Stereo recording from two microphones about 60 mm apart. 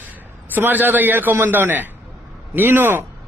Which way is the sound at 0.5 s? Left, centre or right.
Right.